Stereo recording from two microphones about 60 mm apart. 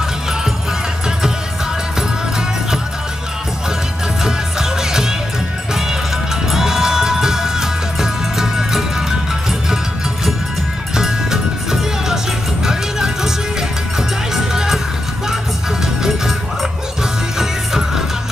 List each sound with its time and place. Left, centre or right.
4.2 s music: centre
6.5 s music: centre
11.0 s music: centre
17.4 s music: centre